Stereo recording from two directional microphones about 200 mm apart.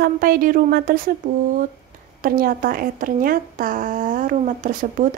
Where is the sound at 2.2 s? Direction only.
45° right (ahead or behind).